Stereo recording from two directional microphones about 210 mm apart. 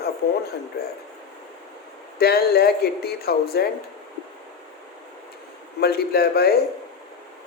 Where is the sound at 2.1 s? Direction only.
45° left (ahead or behind).